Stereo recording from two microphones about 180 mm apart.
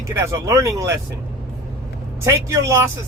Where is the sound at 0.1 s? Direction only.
15° right (ahead or behind).